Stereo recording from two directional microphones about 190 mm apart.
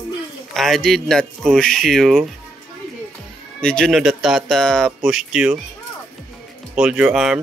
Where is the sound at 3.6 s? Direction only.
5° left (ahead or behind).